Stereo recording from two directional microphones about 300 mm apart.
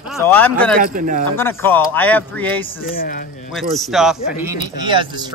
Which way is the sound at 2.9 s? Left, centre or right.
Left.